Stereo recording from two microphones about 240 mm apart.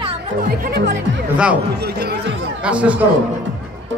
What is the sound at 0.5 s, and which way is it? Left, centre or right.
Speech, right.